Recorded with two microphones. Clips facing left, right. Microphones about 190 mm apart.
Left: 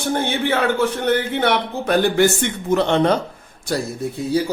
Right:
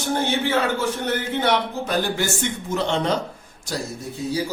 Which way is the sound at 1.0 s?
60° left (ahead or behind).